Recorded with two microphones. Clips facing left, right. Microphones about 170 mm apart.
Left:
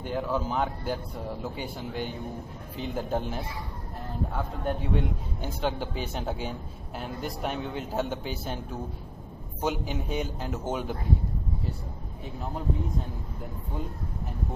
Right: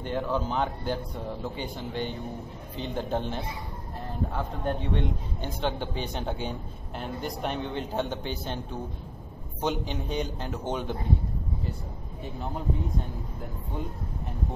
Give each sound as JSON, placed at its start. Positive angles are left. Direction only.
{"t": 0.0, "sound": "a man's voice", "side_deg": 5}
{"t": 9.6, "sound": "a man's voice", "side_deg": 5}